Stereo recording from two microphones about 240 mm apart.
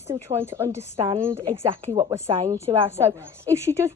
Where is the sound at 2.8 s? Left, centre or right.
Centre.